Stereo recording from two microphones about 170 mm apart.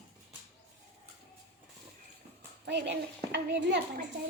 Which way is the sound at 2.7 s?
90° right.